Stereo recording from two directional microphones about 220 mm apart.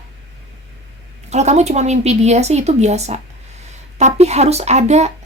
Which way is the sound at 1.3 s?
30° right (ahead or behind).